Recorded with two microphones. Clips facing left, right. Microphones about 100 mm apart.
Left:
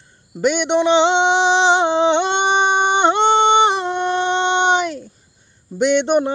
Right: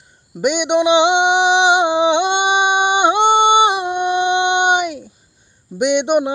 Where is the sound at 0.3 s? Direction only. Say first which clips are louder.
Right 1 dB; 15° right (ahead or behind).